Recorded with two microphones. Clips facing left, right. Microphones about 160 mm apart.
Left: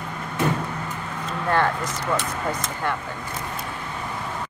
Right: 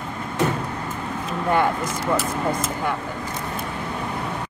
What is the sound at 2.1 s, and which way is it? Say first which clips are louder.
Speech: right 4 dB; 5° right (ahead or behind).